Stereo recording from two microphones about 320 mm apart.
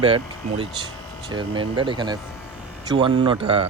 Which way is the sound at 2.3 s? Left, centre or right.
Centre.